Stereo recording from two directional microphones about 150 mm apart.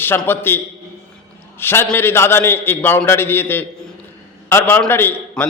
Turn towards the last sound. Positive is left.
turn(degrees=15)  # may be behind; listen again after turning